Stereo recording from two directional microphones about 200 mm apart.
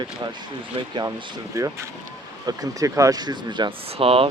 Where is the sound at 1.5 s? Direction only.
15° right (ahead or behind).